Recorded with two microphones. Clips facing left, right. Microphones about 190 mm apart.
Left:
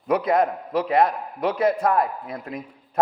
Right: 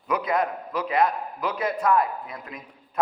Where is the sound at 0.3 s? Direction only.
35° left (ahead or behind); by 3.0 s 50° left (ahead or behind).